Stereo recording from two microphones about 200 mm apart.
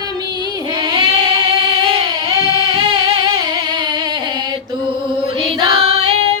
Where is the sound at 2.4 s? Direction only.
20° right (ahead or behind).